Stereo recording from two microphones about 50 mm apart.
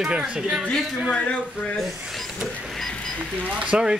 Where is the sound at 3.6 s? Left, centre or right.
Right.